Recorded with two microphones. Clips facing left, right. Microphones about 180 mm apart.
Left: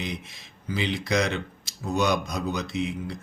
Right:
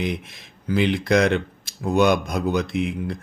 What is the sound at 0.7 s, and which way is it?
Speech, 55° right (ahead or behind).